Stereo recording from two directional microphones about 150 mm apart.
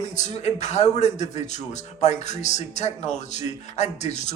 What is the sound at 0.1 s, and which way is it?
A man's voice, 50° left (ahead or behind).